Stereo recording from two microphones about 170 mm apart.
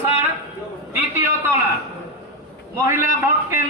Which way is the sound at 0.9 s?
15° right (ahead or behind).